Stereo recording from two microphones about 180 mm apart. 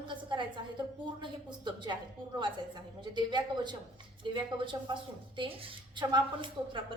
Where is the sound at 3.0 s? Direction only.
25° right (ahead or behind).